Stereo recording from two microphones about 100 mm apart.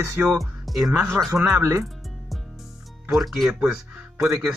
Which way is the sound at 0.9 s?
25° right (ahead or behind).